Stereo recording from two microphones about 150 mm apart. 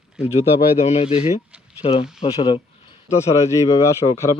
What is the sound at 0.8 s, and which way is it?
Speech, 45° left (ahead or behind).